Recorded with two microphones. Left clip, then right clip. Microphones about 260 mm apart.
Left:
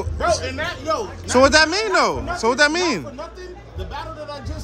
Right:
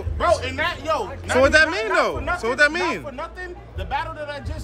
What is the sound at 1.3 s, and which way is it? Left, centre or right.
Speech, centre.